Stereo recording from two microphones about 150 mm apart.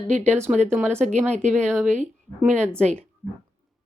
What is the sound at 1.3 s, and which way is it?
Speech, 50° right (ahead or behind).